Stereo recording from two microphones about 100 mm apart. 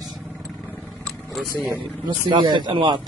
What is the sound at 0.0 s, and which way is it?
Vehicle, centre (ahead or behind).